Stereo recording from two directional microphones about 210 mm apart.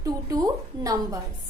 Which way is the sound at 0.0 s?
15° right (ahead or behind).